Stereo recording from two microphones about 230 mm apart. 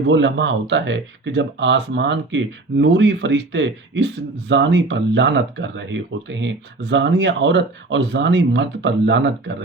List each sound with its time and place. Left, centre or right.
0.1 s speech: right